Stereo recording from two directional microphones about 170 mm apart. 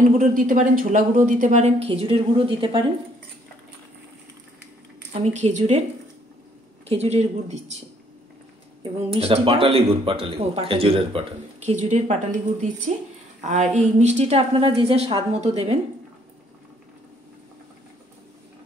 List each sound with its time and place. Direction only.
0.2 s speech: 50° right (ahead or behind); by 2.8 s 30° right (ahead or behind)
5.1 s speech: 40° right (ahead or behind)
6.9 s speech: 40° right (ahead or behind)
9.1 s speech: 35° right (ahead or behind)